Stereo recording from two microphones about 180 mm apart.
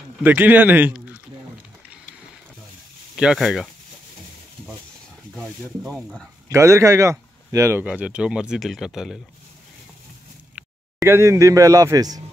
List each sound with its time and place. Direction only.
0.2 s speech: 10° right (ahead or behind)
3.2 s speech: 5° right (ahead or behind)
5.3 s speech: centre (ahead or behind)
6.5 s speech: 15° right (ahead or behind)
11.0 s speech: 15° right (ahead or behind)